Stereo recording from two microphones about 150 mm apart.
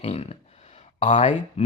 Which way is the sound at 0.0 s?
45° left (ahead or behind).